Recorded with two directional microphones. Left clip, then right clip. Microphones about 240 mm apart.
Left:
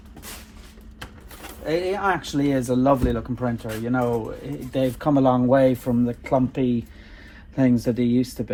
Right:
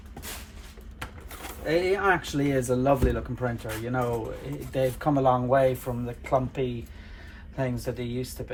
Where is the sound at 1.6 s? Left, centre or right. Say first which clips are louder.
Left 1 dB; centre.